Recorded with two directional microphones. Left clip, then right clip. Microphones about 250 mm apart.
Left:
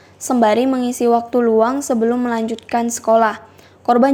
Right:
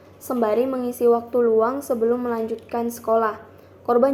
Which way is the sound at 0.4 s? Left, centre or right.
Left.